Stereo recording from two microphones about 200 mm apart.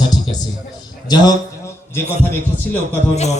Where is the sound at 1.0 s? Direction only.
20° left (ahead or behind).